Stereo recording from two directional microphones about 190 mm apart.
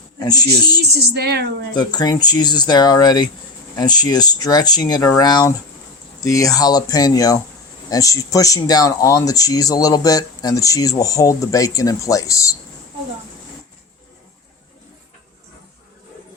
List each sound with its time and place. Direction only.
0.3 s speech: 20° left (ahead or behind)
0.9 s speech: 60° right (ahead or behind)
1.7 s speech: 20° left (ahead or behind)